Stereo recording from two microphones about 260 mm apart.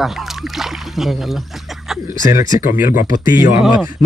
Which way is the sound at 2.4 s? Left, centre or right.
Left.